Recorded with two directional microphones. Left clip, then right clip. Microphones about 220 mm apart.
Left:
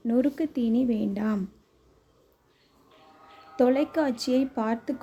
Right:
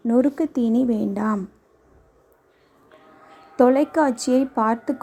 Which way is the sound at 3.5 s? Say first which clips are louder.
Right 6 dB; 10° right (ahead or behind).